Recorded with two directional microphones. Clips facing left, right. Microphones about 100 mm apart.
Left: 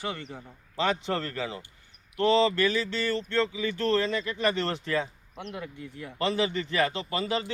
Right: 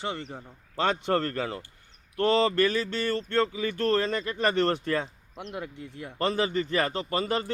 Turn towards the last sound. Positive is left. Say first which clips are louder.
# right 2 dB
turn(degrees=-45)  # may be behind; listen again after turning